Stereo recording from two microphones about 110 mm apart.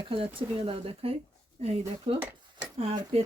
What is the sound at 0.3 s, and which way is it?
Speech, 60° right (ahead or behind).